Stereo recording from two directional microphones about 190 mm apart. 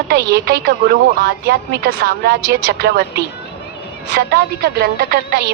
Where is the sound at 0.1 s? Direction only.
60° right (ahead or behind).